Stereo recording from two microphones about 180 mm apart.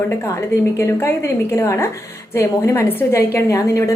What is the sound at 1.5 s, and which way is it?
Speech, 15° left (ahead or behind).